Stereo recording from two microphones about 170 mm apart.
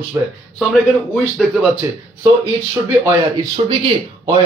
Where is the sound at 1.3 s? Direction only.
Centre (ahead or behind).